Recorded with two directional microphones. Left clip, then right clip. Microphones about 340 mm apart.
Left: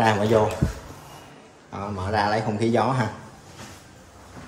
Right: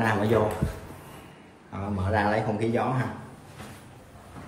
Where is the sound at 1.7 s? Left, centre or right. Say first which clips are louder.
Left 2 dB; centre.